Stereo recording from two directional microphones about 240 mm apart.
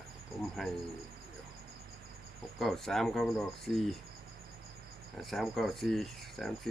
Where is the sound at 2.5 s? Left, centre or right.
Centre.